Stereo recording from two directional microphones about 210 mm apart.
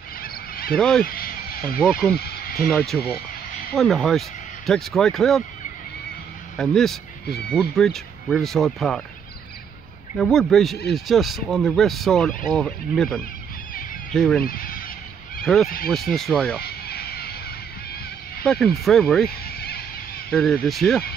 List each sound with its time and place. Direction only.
0.2 s goose: 45° left (ahead or behind)
0.7 s speech: 5° left (ahead or behind)
1.0 s a sound: 45° left (ahead or behind)
1.8 s speech: centre (ahead or behind)
2.1 s a sound: 45° left (ahead or behind)
2.7 s speech: centre (ahead or behind)
6.5 s speech: centre (ahead or behind)
10.1 s speech: centre (ahead or behind)
14.4 s goose: 45° left (ahead or behind)
15.4 s speech: centre (ahead or behind)
16.6 s a sound: 50° left (ahead or behind)
18.4 s speech: centre (ahead or behind)
19.4 s neigh: 50° left (ahead or behind)
20.2 s speech: 5° left (ahead or behind)